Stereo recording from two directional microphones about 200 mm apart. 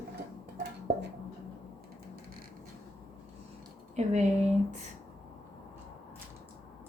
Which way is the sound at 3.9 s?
35° right (ahead or behind).